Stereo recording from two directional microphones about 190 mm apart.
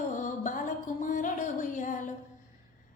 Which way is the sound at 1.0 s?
40° left (ahead or behind).